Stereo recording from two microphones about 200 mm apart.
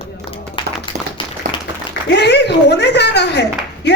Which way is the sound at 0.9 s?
35° right (ahead or behind).